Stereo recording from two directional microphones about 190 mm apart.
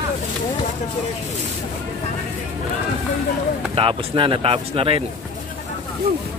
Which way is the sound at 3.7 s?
25° right (ahead or behind).